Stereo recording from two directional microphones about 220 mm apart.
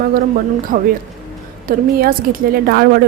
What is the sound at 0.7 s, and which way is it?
A woman's voice, 35° right (ahead or behind).